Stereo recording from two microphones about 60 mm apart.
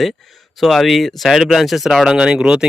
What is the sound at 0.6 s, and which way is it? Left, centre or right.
Speech, centre.